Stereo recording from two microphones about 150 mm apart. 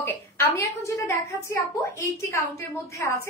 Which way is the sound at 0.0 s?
15° left (ahead or behind).